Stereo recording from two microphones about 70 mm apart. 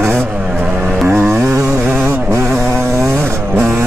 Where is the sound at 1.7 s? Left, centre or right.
Right.